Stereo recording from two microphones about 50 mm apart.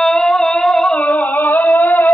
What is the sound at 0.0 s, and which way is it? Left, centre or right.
Music, centre.